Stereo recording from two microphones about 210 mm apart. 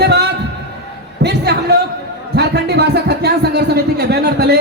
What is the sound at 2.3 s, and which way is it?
Speech, 50° right (ahead or behind).